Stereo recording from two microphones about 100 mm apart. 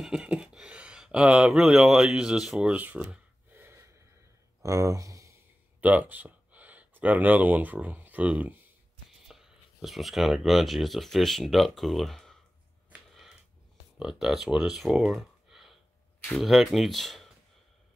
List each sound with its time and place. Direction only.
0.0 s speech: 10° right (ahead or behind)
3.5 s gasp: 20° right (ahead or behind)
4.6 s speech: 35° right (ahead or behind)
5.8 s speech: 15° right (ahead or behind)
9.3 s speech: 5° right (ahead or behind)
13.1 s a sound: centre (ahead or behind)
13.9 s speech: 5° right (ahead or behind)